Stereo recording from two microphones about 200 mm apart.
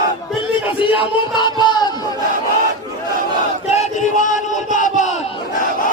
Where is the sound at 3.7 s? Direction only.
35° left (ahead or behind).